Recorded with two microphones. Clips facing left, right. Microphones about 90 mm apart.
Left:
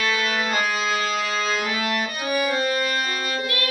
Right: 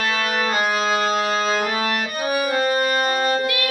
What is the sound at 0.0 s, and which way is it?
Music, 40° right (ahead or behind).